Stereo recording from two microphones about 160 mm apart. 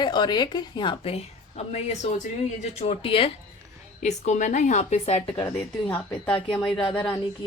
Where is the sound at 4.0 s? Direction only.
50° left (ahead or behind).